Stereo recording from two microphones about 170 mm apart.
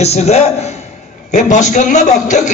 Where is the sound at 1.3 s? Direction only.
45° left (ahead or behind).